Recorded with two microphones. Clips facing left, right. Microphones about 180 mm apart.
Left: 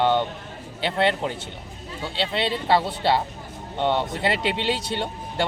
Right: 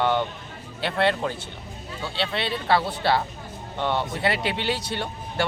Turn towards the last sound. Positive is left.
turn(degrees=20)  # may be behind; listen again after turning